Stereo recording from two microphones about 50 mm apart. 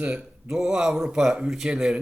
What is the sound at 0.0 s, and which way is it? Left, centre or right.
Speech, centre.